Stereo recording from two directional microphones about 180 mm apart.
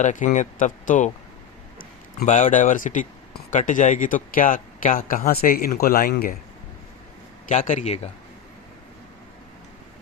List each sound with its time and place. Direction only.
0.0 s speech: 45° left (ahead or behind)
7.4 s a man's voice: 45° left (ahead or behind)